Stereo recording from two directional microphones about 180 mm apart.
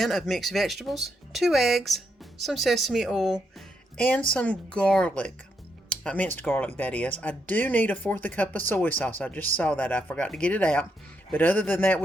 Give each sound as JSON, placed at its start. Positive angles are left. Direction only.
{"t": 0.0, "sound": "speech", "side_deg": 0}